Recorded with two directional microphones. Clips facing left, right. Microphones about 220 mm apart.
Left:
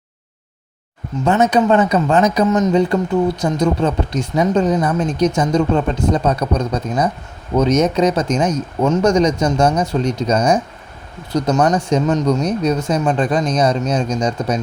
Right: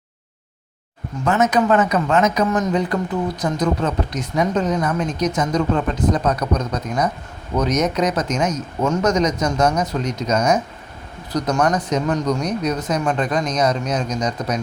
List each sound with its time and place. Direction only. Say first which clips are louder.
1.2 s speech: left 3 dB; 30° left (ahead or behind)